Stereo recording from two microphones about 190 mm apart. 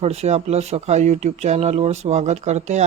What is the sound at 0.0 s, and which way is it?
Speech, 35° right (ahead or behind).